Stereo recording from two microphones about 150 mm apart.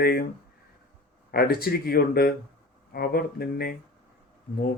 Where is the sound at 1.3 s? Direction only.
90° left.